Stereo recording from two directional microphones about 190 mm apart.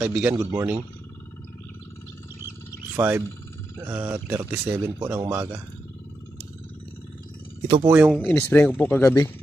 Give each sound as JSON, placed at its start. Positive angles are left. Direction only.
{"t": 0.0, "sound": "speech", "side_deg": -5}
{"t": 3.0, "sound": "speech", "side_deg": -10}
{"t": 7.6, "sound": "speech", "side_deg": -25}
{"t": 7.9, "sound": "speech", "side_deg": -5}
{"t": 8.2, "sound": "speech", "side_deg": 10}